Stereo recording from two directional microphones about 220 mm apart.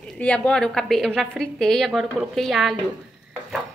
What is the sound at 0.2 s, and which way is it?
Speech, 5° left (ahead or behind).